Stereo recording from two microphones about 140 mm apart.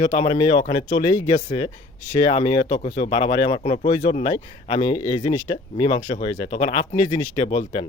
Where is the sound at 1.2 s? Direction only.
55° left (ahead or behind).